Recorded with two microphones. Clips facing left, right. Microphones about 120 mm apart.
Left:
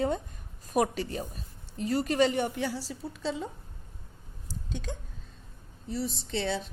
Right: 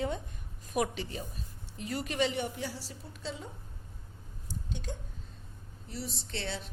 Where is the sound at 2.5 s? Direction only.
75° left (ahead or behind).